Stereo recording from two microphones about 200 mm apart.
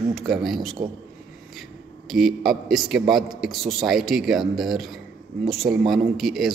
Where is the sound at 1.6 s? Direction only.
Centre (ahead or behind).